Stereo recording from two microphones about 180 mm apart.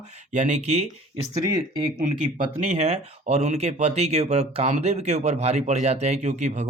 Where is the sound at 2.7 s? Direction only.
40° right (ahead or behind).